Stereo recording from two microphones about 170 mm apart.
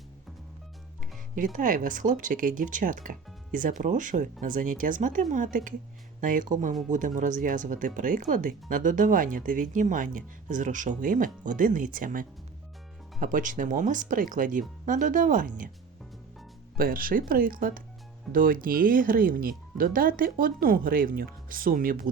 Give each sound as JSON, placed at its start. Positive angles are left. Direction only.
{"t": 1.5, "sound": "speech", "side_deg": -50}
{"t": 16.7, "sound": "speech", "side_deg": -55}